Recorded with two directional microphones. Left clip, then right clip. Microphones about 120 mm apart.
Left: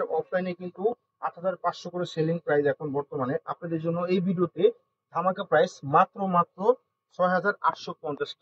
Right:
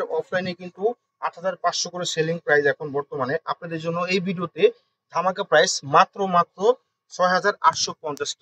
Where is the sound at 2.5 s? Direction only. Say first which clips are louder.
Right 6 dB; 80° right; by 4.7 s 65° right (ahead or behind).